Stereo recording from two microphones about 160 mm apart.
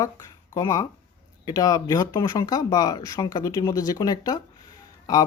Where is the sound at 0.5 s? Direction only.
20° left (ahead or behind).